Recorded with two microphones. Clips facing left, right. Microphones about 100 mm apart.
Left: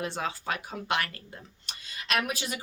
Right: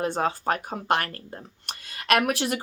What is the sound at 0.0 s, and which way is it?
Speech, 45° right (ahead or behind).